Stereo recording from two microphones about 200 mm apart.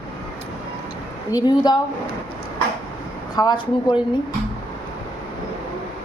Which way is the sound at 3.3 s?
20° left (ahead or behind).